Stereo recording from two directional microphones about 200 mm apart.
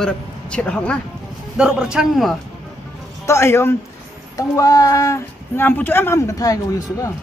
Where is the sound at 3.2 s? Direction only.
15° left (ahead or behind).